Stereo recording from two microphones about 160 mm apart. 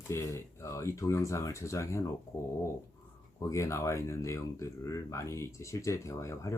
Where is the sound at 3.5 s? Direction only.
20° left (ahead or behind).